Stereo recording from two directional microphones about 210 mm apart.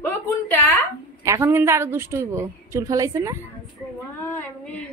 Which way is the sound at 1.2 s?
10° right (ahead or behind).